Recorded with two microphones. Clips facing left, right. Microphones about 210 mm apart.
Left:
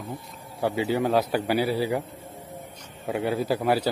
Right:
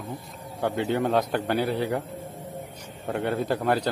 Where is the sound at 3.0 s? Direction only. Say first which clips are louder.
Left 1 dB; 5° left (ahead or behind).